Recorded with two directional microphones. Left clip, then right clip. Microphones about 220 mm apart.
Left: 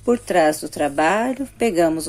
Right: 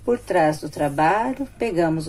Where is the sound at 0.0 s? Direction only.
40° left (ahead or behind).